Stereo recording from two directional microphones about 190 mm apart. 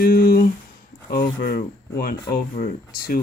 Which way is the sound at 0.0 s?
50° left (ahead or behind).